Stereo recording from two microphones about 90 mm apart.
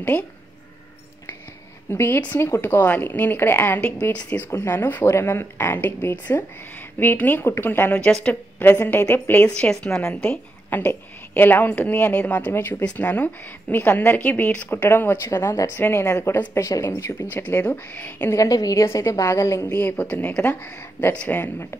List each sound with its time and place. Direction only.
1.9 s speech: 25° left (ahead or behind)
4.5 s a woman's voice: 25° left (ahead or behind)
8.6 s speech: 25° left (ahead or behind)
9.6 s a woman's voice: 10° left (ahead or behind)
10.7 s speech: 20° left (ahead or behind)
15.2 s speech: 40° left (ahead or behind)
17.3 s speech: 20° left (ahead or behind)
18.3 s speech: 40° left (ahead or behind)
19.7 s a woman's voice: 20° left (ahead or behind)